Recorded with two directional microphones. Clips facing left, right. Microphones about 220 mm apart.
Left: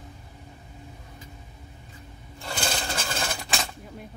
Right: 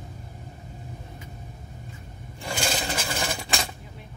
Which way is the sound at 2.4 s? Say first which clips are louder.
Right 2 dB; 10° right (ahead or behind).